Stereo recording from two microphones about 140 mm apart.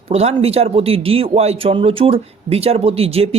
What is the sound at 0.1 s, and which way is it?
Speech, 45° right (ahead or behind).